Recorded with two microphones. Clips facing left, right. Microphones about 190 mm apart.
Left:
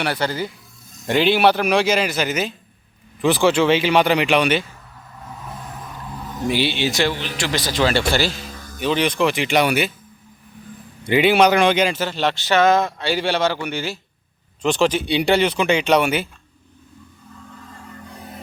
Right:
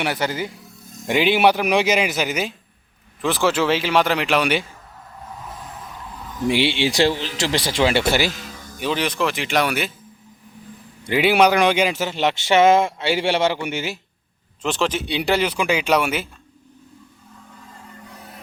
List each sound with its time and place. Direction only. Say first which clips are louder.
0.0 s speech: left 1 dB; 15° right (ahead or behind)
3.2 s speech: left 3 dB; centre (ahead or behind)
6.5 s speech: right 1 dB; 25° right (ahead or behind)
7.8 s speech: even; 15° right (ahead or behind)
8.8 s speech: left 3 dB; 5° right (ahead or behind)
11.0 s speech: left 1 dB; 5° right (ahead or behind); by 14.0 s 20° right (ahead or behind)
14.6 s speech: left 4 dB; centre (ahead or behind)